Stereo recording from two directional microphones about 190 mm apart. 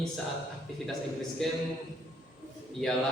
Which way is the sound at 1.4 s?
5° left (ahead or behind).